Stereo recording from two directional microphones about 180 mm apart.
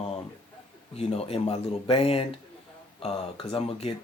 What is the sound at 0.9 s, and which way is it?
Speech, 35° left (ahead or behind).